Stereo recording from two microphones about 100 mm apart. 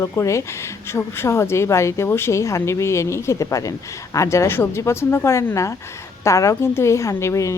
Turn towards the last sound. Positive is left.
turn(degrees=30)  # may be behind; listen again after turning